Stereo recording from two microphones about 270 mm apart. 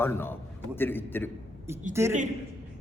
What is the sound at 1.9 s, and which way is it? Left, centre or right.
Speech, centre.